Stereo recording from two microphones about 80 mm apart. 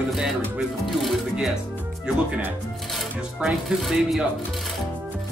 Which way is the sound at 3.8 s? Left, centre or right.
Centre.